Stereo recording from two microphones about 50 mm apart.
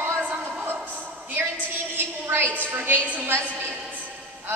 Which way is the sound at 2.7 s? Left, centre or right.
Right.